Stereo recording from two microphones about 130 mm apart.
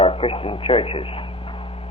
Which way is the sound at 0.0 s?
45° left (ahead or behind).